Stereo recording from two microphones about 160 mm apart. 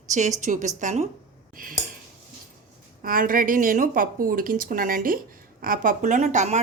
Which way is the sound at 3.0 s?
60° right (ahead or behind).